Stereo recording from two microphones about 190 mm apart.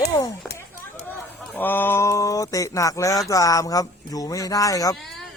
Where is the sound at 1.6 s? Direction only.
10° left (ahead or behind).